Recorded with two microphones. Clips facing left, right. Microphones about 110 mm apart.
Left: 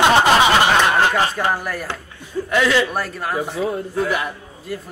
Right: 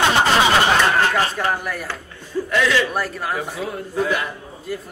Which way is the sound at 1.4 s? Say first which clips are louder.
Left 1 dB; centre (ahead or behind).